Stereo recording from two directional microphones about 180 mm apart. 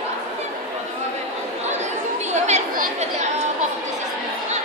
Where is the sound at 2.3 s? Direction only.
40° right (ahead or behind).